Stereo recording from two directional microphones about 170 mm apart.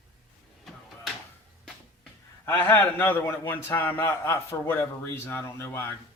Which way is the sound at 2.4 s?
10° left (ahead or behind).